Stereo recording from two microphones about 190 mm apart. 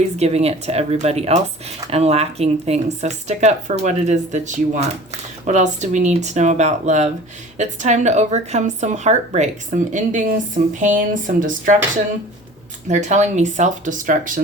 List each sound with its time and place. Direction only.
0.0 s speech: 35° right (ahead or behind)
12.9 s speech: 40° right (ahead or behind)